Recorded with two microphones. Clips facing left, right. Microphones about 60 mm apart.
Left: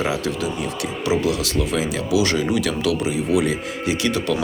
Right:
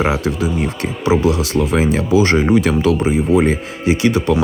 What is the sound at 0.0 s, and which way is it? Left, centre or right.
Speech, right.